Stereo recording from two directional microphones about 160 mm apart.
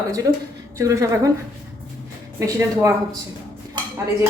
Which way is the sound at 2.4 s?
15° right (ahead or behind).